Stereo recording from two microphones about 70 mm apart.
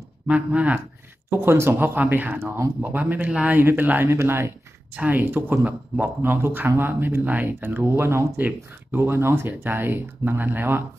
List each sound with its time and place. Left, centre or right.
0.3 s speech: right
1.3 s speech: right
2.0 s speech: right
4.9 s speech: right